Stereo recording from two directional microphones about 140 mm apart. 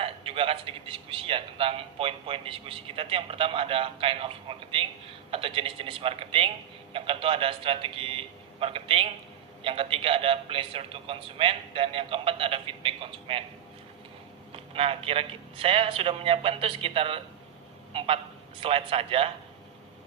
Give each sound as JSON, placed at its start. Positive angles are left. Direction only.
{"t": 0.0, "sound": "a man's voice", "side_deg": -40}
{"t": 14.5, "sound": "a man's voice", "side_deg": -40}